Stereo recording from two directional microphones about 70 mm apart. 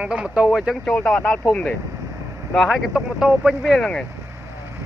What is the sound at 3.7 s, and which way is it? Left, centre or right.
Speech, centre.